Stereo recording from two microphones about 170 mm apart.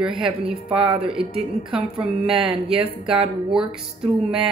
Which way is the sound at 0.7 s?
35° right (ahead or behind).